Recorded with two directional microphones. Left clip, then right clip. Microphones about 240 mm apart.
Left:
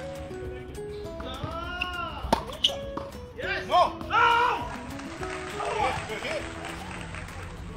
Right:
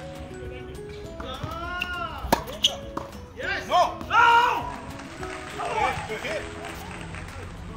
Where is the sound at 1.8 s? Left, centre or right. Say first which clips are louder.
Even; centre.